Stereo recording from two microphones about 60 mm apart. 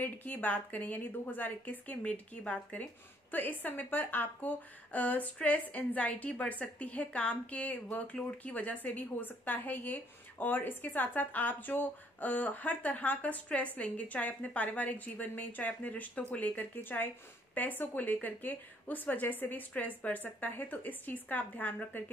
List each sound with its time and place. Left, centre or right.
0.0 s speech: left